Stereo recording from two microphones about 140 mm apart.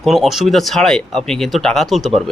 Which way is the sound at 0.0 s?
Centre (ahead or behind).